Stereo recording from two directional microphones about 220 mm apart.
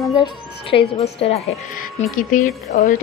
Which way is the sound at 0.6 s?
25° left (ahead or behind).